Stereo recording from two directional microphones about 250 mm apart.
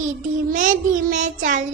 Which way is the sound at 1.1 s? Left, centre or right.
Right.